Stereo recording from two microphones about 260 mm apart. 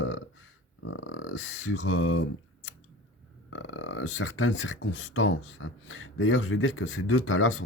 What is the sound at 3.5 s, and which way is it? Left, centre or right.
Speech, left.